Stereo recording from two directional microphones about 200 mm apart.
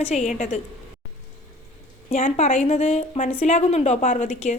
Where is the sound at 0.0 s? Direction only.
35° left (ahead or behind).